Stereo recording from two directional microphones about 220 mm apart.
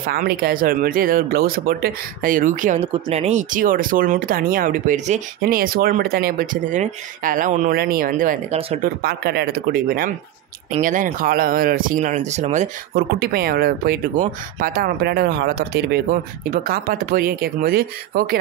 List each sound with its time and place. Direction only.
0.0 s speech: 40° right (ahead or behind)